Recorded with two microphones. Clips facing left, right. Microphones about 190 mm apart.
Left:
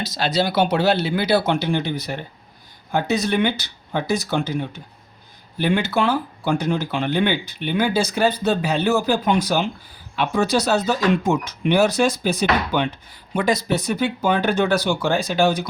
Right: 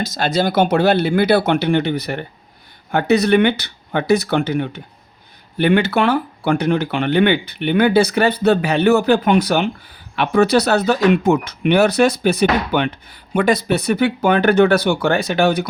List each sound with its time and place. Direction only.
0.0 s speech: 50° right (ahead or behind); by 15.6 s 65° right (ahead or behind)